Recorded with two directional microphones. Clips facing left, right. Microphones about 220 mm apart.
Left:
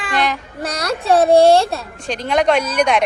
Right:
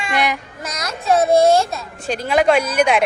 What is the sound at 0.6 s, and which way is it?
A child's voice, 30° left (ahead or behind).